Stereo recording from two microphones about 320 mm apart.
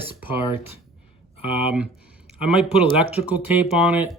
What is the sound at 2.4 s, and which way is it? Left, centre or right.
Speech, centre.